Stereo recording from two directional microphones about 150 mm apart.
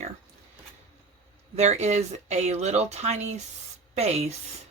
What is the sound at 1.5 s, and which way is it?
Speech, 50° right (ahead or behind).